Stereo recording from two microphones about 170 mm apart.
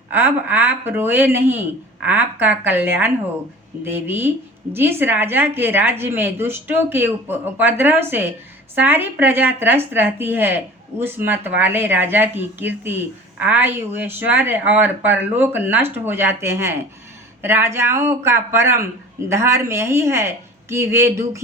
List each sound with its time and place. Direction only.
0.1 s speech: 10° right (ahead or behind)